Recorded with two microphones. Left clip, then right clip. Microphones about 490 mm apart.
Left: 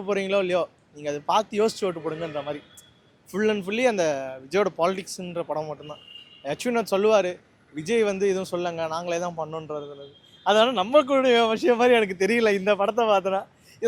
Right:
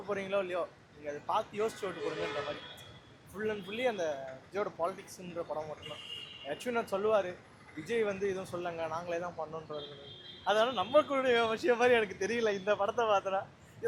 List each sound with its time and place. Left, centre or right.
0.1 s speech: left
3.3 s speech: left